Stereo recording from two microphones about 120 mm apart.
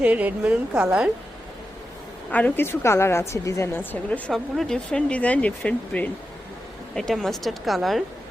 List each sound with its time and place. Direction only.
0.0 s a woman's voice: 10° right (ahead or behind)
2.3 s a woman's voice: 15° left (ahead or behind)
4.3 s a woman's voice: 5° left (ahead or behind)